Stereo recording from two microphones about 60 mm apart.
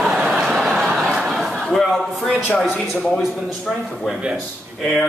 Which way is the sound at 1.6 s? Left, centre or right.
Centre.